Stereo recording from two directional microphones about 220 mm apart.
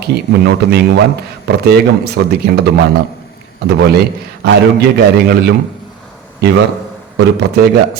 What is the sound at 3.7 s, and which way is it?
Speech, 50° right (ahead or behind).